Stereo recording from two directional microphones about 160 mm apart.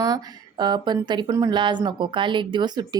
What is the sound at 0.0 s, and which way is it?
Speech, 25° right (ahead or behind).